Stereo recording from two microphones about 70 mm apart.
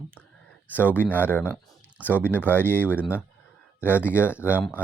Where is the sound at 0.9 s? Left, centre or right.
Left.